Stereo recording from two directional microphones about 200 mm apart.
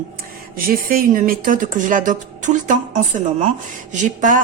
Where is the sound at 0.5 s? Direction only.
45° right (ahead or behind).